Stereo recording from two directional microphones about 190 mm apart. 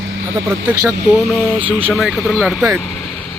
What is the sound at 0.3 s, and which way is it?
Speech, 20° right (ahead or behind).